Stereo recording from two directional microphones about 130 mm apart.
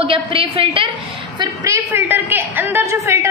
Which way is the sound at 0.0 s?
45° right (ahead or behind).